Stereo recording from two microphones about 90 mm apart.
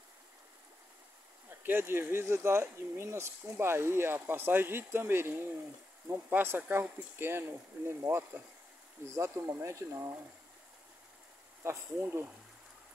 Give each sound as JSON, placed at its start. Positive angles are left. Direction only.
{"t": 1.6, "sound": "speech", "side_deg": -25}
{"t": 11.6, "sound": "speech", "side_deg": -25}